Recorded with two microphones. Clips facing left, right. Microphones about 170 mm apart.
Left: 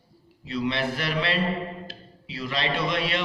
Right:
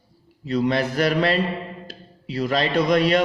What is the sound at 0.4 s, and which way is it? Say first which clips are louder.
A man's voice: right 6 dB; 45° right (ahead or behind).